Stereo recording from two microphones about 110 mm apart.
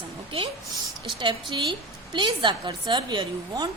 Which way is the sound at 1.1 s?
45° right (ahead or behind).